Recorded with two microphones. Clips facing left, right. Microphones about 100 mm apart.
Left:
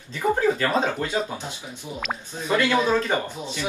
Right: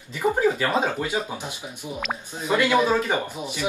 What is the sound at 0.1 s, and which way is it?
A man's voice, 15° right (ahead or behind).